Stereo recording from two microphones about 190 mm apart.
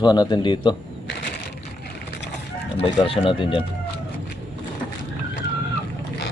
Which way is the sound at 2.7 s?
30° left (ahead or behind).